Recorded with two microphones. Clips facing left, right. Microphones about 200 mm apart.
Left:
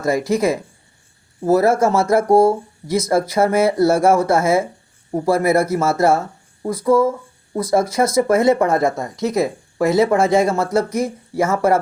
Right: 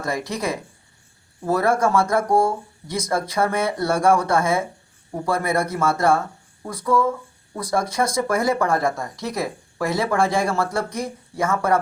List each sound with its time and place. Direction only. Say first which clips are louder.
0.3 s speech: left 8 dB; 25° left (ahead or behind)